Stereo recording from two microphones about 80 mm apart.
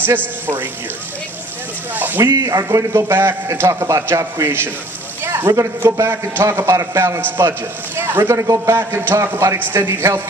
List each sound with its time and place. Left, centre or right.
2.0 s speech: right
2.3 s a man's voice: right
5.2 s a sound: right
5.8 s a man's voice: right